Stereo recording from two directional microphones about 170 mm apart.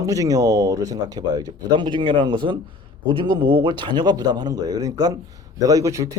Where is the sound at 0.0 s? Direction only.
20° right (ahead or behind).